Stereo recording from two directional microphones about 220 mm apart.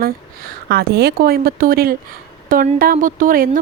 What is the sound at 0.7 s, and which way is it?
A woman's voice, 45° right (ahead or behind).